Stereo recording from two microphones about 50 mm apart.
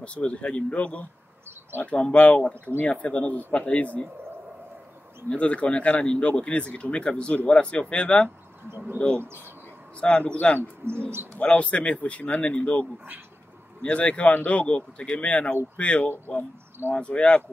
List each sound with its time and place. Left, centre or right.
0.0 s speech: left
5.3 s speech: left
9.1 s speech: right
9.9 s speech: left
10.8 s speech: right
11.4 s speech: left